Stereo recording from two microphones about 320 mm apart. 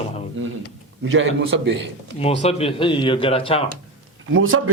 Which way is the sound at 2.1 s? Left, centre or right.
Centre.